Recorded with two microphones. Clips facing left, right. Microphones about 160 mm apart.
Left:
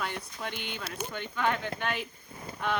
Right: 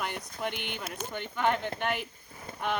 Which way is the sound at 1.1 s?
15° right (ahead or behind).